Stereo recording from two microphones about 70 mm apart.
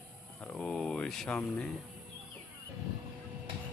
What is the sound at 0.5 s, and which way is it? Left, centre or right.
Speech, centre.